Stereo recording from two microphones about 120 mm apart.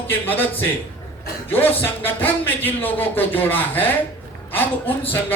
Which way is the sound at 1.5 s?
15° left (ahead or behind).